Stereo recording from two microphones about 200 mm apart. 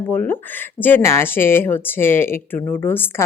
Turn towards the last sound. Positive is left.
turn(degrees=10)  # may be behind; listen again after turning